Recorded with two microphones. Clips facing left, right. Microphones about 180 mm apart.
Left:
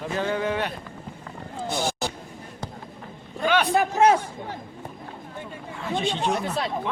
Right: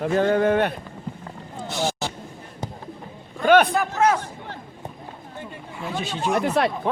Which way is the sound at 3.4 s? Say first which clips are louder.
Right 7 dB; 50° right (ahead or behind).